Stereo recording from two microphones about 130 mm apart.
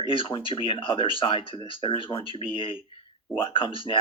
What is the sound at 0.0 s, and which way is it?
Speech, 40° left (ahead or behind).